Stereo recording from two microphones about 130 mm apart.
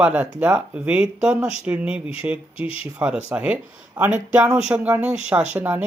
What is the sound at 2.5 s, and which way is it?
Speech, 45° left (ahead or behind).